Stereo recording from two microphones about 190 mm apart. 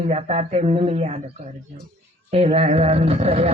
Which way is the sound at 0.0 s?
35° right (ahead or behind).